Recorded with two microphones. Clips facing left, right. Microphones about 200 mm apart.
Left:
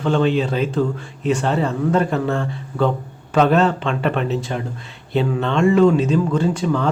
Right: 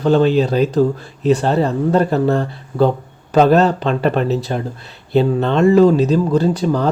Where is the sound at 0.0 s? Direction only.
40° right (ahead or behind).